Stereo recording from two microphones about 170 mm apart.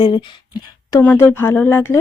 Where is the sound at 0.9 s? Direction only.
15° left (ahead or behind).